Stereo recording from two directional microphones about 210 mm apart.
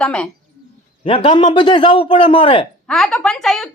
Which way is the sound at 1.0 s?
25° left (ahead or behind).